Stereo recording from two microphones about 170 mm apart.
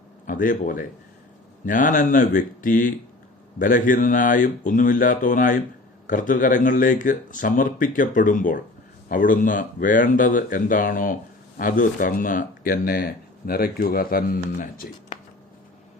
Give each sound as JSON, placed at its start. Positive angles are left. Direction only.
{"t": 0.3, "sound": "speech", "side_deg": 50}